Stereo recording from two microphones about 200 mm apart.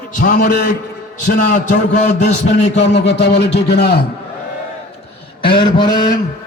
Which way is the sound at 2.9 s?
55° left (ahead or behind).